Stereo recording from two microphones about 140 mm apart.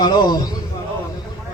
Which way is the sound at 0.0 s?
30° left (ahead or behind).